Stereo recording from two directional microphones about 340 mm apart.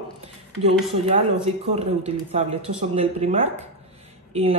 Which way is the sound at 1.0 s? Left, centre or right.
Centre.